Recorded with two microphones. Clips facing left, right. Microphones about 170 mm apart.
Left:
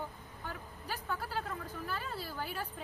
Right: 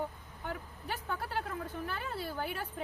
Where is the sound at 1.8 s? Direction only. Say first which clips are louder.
Right 2 dB; 60° right (ahead or behind).